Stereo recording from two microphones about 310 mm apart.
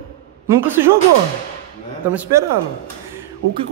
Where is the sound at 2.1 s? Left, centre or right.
Centre.